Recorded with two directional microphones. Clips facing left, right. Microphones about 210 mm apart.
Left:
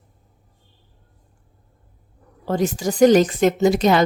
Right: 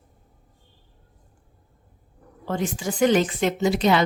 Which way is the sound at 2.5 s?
40° left (ahead or behind).